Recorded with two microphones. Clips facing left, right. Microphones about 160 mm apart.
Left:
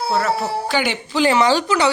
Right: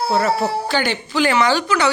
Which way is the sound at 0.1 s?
Centre (ahead or behind).